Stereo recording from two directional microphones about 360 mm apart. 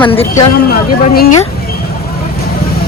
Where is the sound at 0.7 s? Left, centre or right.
Left.